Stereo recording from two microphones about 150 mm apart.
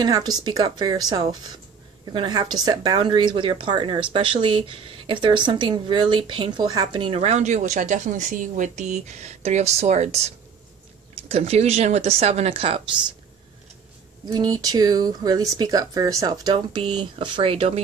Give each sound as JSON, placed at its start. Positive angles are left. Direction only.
{"t": 0.0, "sound": "speech", "side_deg": -25}
{"t": 14.3, "sound": "speech", "side_deg": -25}